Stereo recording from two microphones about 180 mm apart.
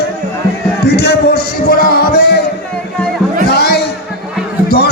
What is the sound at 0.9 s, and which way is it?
Music, 65° left (ahead or behind).